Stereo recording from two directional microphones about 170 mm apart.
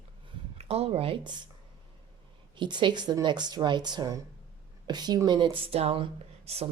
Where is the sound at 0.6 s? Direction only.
35° right (ahead or behind).